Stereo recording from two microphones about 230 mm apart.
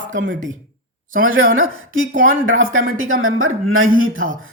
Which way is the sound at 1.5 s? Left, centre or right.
Right.